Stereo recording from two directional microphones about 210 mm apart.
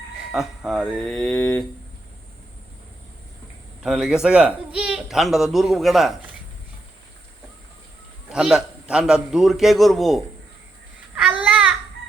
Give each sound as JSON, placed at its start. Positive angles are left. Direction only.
{"t": 0.3, "sound": "speech", "side_deg": 0}
{"t": 3.8, "sound": "speech", "side_deg": -5}
{"t": 8.3, "sound": "speech", "side_deg": -5}
{"t": 11.1, "sound": "babbling", "side_deg": -5}